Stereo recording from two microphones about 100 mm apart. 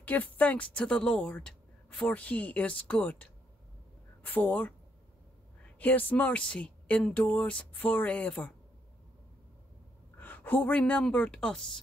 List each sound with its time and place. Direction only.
0.0 s a woman's voice: 15° left (ahead or behind)
5.8 s a woman's voice: 15° left (ahead or behind)
10.1 s a woman's voice: 20° left (ahead or behind)